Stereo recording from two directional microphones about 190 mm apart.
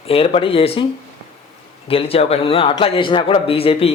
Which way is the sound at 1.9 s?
30° left (ahead or behind).